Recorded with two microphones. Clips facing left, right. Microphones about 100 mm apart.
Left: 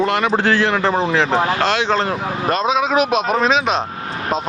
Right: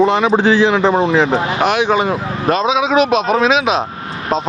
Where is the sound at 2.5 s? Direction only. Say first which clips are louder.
Right 3 dB; centre (ahead or behind).